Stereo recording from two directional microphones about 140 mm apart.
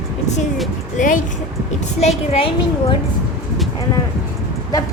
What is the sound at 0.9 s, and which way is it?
Speech, 65° left (ahead or behind).